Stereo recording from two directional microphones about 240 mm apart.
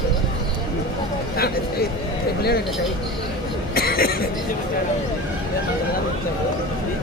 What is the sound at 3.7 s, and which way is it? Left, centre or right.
Chuckle, left.